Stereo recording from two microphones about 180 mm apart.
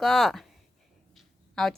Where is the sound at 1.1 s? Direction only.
Centre (ahead or behind).